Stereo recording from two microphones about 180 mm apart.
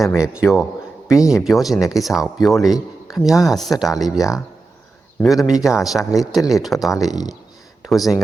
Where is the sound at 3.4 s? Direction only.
Centre (ahead or behind).